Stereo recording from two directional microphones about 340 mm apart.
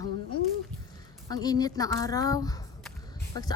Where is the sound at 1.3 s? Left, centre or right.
Centre.